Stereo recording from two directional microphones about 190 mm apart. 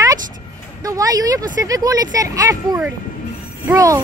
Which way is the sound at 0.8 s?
20° right (ahead or behind).